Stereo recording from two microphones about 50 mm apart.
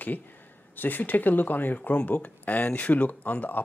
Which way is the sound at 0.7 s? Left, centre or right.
Left.